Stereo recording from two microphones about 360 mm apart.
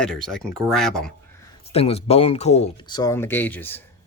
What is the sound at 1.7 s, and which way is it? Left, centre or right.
Speech, centre.